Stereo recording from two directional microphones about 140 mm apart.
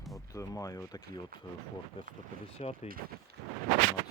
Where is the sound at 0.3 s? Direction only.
25° left (ahead or behind).